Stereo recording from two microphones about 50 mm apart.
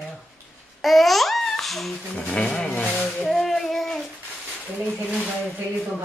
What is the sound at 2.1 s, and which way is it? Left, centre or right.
Rub, left.